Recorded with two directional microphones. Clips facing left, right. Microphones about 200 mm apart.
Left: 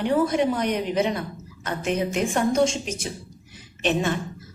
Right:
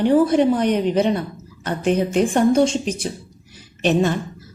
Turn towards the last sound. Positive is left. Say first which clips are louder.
# right 5 dB
turn(degrees=-35)  # may be behind; listen again after turning